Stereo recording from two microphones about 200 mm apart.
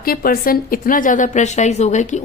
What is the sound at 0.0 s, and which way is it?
A woman's voice, 50° left (ahead or behind).